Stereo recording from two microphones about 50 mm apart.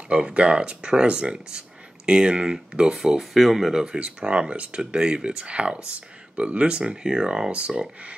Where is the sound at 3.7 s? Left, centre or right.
Centre.